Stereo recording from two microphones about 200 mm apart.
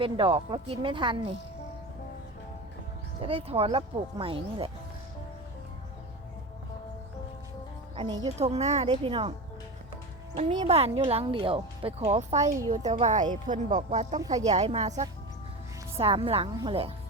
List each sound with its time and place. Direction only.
0.0 s speech: 25° right (ahead or behind)
3.2 s speech: 30° right (ahead or behind)
7.9 s speech: 20° right (ahead or behind)
8.4 s a woman's voice: 35° right (ahead or behind)
10.7 s a woman's voice: 30° right (ahead or behind)
14.2 s speech: 20° right (ahead or behind)
14.4 s a woman's voice: 35° right (ahead or behind)